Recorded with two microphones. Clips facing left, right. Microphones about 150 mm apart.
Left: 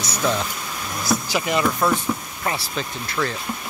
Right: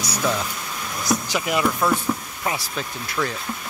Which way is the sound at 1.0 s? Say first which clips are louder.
Left 1 dB; 5° left (ahead or behind).